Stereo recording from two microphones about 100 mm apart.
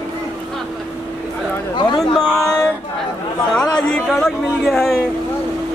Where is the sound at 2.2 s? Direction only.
20° right (ahead or behind).